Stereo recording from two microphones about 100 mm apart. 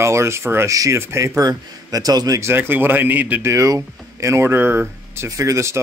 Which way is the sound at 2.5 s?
20° right (ahead or behind).